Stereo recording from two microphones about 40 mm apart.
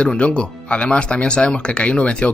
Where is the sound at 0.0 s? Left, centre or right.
Left.